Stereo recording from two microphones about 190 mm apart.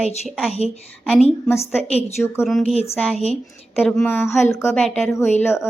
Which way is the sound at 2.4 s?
Centre (ahead or behind).